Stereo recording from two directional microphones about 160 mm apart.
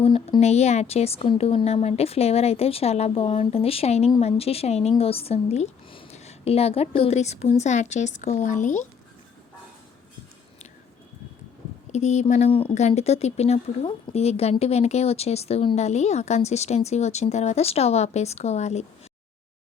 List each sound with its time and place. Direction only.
0.0 s speech: 35° left (ahead or behind)
11.9 s speech: 45° left (ahead or behind)